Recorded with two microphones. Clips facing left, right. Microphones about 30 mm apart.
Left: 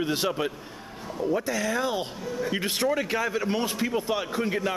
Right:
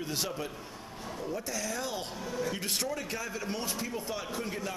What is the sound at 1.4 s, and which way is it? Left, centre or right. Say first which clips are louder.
A man's voice: left 9 dB; left.